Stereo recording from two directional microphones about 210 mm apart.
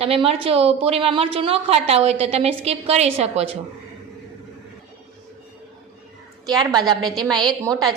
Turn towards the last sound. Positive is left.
turn(degrees=-20)  # may be behind; listen again after turning